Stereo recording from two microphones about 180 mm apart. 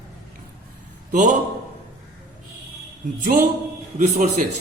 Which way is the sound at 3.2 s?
55° right (ahead or behind).